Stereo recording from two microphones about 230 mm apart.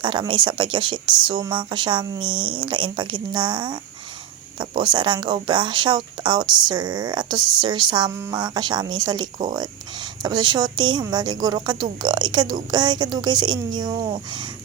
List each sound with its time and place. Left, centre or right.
0.0 s speech: right